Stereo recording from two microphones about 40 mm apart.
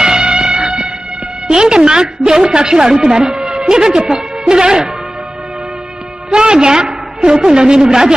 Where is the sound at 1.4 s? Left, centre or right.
Centre.